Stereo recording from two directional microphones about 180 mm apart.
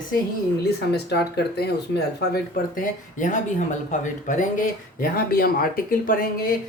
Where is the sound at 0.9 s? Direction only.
65° left (ahead or behind); by 4.4 s 45° left (ahead or behind).